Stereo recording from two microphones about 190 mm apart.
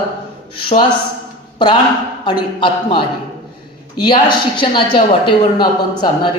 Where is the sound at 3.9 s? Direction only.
25° left (ahead or behind).